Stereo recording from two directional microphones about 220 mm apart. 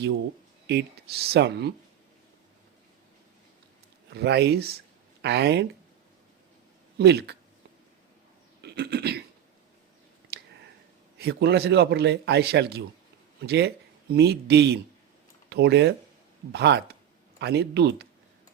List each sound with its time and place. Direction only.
0.7 s a man's voice: 50° right (ahead or behind)
4.1 s a man's voice: 50° right (ahead or behind)
7.0 s a man's voice: 50° right (ahead or behind)
8.6 s a sound: 45° right (ahead or behind)
10.3 s a sound: 45° right (ahead or behind)
11.2 s a man's voice: 50° right (ahead or behind)